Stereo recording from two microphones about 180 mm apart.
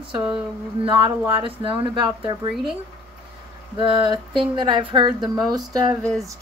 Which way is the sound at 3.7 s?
30° right (ahead or behind).